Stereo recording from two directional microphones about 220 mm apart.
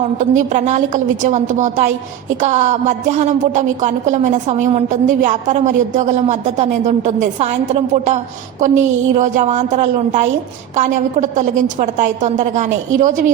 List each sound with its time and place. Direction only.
0.0 s a woman's voice: 35° right (ahead or behind)